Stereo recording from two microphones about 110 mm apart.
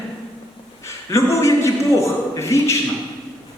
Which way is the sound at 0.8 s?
25° left (ahead or behind).